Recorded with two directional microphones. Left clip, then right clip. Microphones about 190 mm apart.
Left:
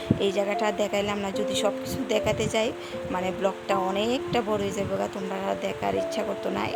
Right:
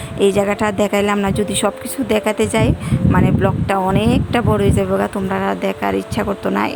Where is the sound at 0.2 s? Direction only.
20° right (ahead or behind).